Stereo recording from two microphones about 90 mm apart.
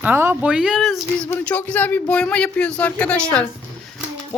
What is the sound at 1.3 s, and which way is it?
Speech, 15° left (ahead or behind).